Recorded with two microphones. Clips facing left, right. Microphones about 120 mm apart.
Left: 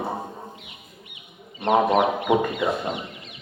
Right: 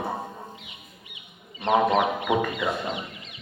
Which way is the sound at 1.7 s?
Centre (ahead or behind).